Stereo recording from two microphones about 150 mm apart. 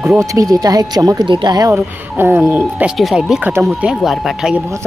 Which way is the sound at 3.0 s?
Centre (ahead or behind).